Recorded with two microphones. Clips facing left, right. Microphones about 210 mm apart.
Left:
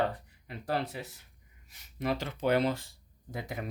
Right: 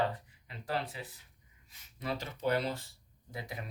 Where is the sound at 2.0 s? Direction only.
80° left; by 3.6 s 50° left (ahead or behind).